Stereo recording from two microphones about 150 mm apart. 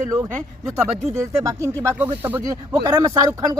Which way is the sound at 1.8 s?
20° right (ahead or behind).